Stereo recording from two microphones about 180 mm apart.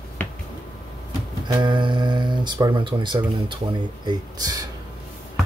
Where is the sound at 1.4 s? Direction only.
25° right (ahead or behind).